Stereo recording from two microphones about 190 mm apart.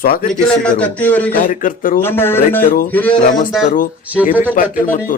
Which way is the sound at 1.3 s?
45° left (ahead or behind).